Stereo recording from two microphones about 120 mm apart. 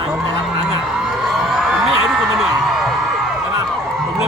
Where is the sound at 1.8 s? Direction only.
Centre (ahead or behind).